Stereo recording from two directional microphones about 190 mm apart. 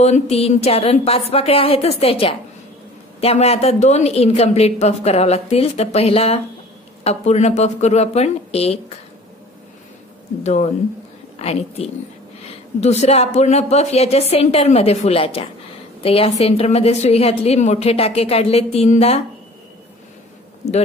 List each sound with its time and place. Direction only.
0.0 s a woman's voice: 35° left (ahead or behind)
10.4 s a woman's voice: 35° left (ahead or behind)
20.6 s a man's voice: 35° left (ahead or behind)